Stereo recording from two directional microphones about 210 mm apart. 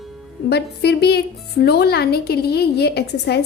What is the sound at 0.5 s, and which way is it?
A woman's voice, 50° left (ahead or behind).